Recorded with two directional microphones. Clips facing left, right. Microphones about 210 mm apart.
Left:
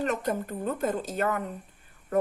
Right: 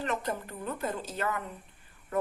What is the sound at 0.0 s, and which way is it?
A woman's voice, 45° left (ahead or behind).